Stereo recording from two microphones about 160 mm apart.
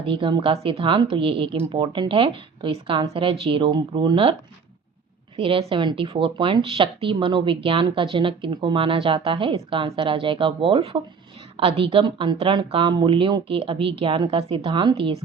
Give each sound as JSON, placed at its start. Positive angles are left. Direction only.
{"t": 0.0, "sound": "speech", "side_deg": -35}
{"t": 5.4, "sound": "speech", "side_deg": -35}